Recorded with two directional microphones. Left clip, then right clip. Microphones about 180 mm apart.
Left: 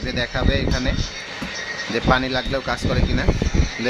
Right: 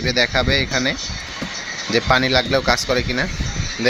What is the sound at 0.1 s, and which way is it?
Speech, 15° right (ahead or behind).